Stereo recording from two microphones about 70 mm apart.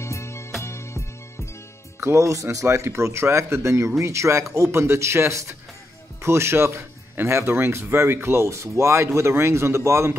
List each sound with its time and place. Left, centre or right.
0.0 s music: left
2.0 s speech: right